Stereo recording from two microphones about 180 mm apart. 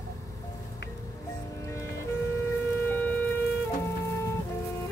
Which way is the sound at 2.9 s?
10° left (ahead or behind).